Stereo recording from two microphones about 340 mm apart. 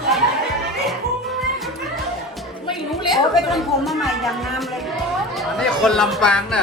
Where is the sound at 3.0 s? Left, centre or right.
Centre.